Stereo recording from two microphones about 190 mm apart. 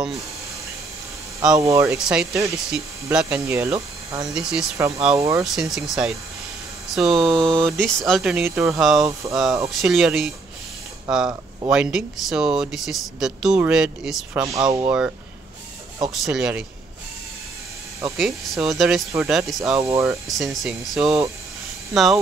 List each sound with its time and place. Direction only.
1.6 s speech: 15° right (ahead or behind)
2.0 s speech: 5° right (ahead or behind)
4.3 s speech: 5° right (ahead or behind)
4.7 s speech: 15° right (ahead or behind)
5.4 s speech: centre (ahead or behind)
14.4 s speech: 20° right (ahead or behind)
14.9 s speech: 5° right (ahead or behind)
18.1 s speech: centre (ahead or behind)
19.8 s speech: 15° right (ahead or behind)
20.2 s speech: centre (ahead or behind)